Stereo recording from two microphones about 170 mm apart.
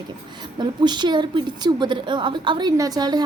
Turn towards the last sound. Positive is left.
turn(degrees=-25)  # may be behind; listen again after turning